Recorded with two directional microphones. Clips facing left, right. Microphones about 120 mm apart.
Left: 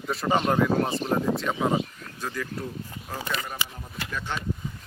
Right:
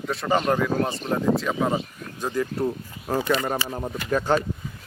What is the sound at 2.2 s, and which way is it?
Speech, 25° right (ahead or behind).